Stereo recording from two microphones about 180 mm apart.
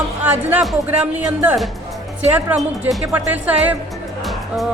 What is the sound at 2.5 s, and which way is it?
A woman's voice, 10° right (ahead or behind).